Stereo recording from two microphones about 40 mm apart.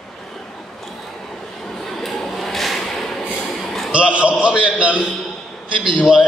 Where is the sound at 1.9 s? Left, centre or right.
Centre.